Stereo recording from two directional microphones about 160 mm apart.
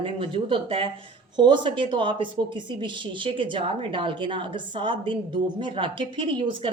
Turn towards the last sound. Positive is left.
turn(degrees=-30)  # may be behind; listen again after turning